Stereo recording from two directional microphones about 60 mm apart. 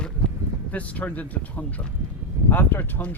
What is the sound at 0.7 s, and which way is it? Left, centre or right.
Speech, left.